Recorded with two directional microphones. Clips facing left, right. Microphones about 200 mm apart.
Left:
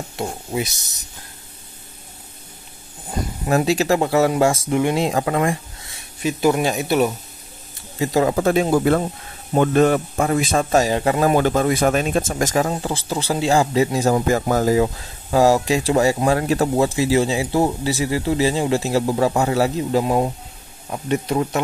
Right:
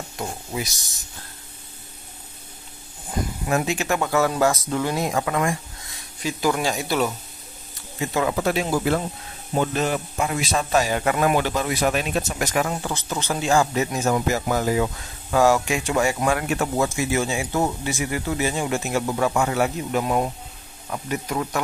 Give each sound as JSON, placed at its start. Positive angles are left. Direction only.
{"t": 0.1, "sound": "speech", "side_deg": 25}
{"t": 3.1, "sound": "speech", "side_deg": 35}
{"t": 8.0, "sound": "speech", "side_deg": 35}
{"t": 8.5, "sound": "speech", "side_deg": 50}
{"t": 11.0, "sound": "speech", "side_deg": 30}
{"t": 11.3, "sound": "speech", "side_deg": 45}
{"t": 12.6, "sound": "speech", "side_deg": 30}
{"t": 14.3, "sound": "speech", "side_deg": 45}